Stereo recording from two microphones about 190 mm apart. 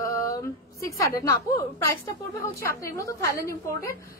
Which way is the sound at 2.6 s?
15° left (ahead or behind).